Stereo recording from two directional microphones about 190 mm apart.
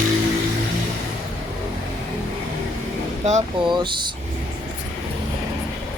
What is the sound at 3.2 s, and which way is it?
Speech, 40° right (ahead or behind).